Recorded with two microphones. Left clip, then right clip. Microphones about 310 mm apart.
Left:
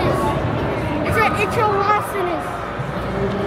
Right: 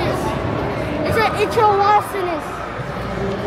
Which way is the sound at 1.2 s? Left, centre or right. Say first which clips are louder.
Right 1 dB; right.